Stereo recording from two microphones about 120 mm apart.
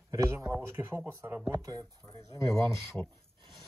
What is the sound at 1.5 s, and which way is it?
Speech, 30° right (ahead or behind).